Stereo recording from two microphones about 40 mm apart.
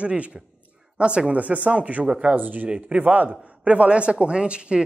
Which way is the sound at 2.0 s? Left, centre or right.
Right.